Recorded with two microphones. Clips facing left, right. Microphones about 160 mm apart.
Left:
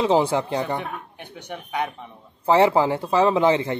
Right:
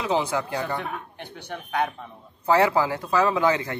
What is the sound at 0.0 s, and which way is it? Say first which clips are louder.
A man's voice: left 5 dB; 30° left (ahead or behind).